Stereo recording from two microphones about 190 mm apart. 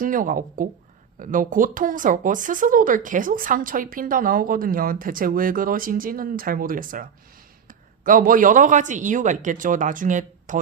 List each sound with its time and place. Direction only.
0.0 s speech: 45° right (ahead or behind)